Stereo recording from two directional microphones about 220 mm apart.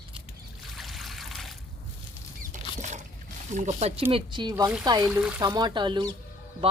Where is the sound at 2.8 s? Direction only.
30° right (ahead or behind).